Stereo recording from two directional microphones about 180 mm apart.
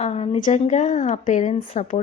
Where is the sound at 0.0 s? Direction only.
35° left (ahead or behind).